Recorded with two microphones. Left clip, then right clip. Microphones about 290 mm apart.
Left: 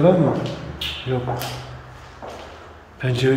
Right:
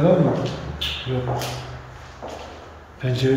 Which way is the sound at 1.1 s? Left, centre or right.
Centre.